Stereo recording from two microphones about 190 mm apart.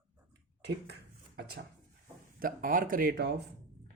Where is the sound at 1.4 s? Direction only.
55° right (ahead or behind).